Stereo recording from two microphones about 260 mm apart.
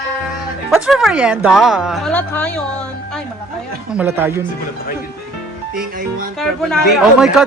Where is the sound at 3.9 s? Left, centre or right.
Centre.